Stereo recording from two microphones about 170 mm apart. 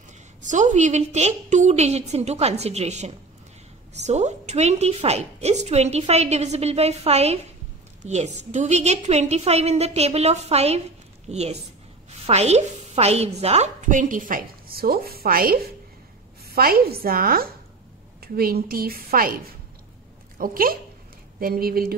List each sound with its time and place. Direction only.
0.4 s a woman's voice: 45° right (ahead or behind)
20.3 s a woman's voice: 55° right (ahead or behind)